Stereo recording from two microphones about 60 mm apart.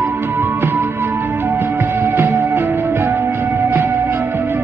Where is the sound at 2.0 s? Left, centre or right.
Right.